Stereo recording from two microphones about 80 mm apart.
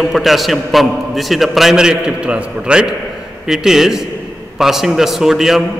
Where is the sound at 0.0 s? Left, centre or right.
Centre.